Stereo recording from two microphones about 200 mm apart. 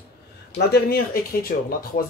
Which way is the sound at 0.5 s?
50° left (ahead or behind).